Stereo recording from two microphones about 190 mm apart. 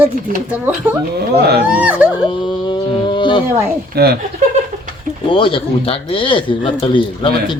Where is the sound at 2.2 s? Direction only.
25° left (ahead or behind).